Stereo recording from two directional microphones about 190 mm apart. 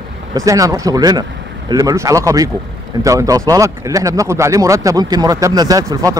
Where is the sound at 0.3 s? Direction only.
15° right (ahead or behind).